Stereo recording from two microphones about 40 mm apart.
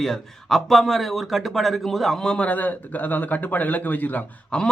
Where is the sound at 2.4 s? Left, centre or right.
Left.